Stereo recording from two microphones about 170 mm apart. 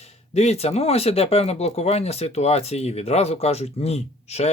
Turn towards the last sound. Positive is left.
turn(degrees=40)  # may be behind; listen again after turning